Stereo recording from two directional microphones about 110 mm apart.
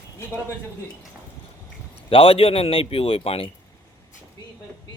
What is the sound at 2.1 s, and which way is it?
A man's voice, 55° left (ahead or behind).